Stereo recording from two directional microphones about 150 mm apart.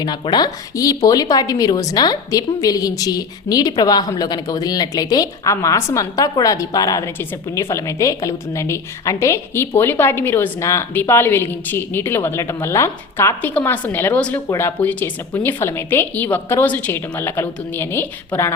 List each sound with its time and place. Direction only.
0.0 s a woman's voice: 30° left (ahead or behind); by 18.5 s 10° left (ahead or behind)